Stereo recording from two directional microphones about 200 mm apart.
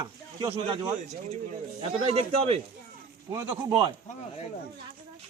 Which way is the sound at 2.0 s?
30° right (ahead or behind).